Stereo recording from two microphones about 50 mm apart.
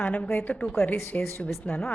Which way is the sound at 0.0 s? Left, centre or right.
Left.